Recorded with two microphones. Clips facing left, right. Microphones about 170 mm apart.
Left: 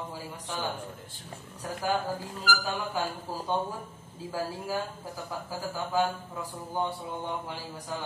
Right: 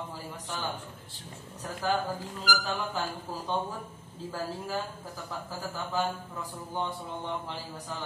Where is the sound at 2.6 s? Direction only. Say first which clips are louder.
Left 1 dB; 10° left (ahead or behind).